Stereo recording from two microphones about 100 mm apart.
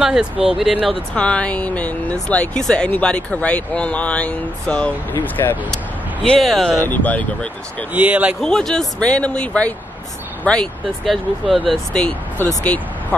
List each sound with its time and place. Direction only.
0.0 s speech: 5° right (ahead or behind)
1.1 s speech: 10° left (ahead or behind)
5.1 s speech: 20° left (ahead or behind)
6.2 s speech: 5° left (ahead or behind)
6.8 s speech: 15° left (ahead or behind)
7.9 s speech: 15° right (ahead or behind)
8.4 s speech: 5° left (ahead or behind)